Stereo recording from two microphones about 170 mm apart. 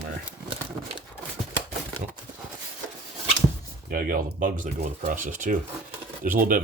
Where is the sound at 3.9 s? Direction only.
55° right (ahead or behind).